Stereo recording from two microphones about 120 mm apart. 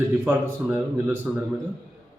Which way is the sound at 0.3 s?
15° right (ahead or behind).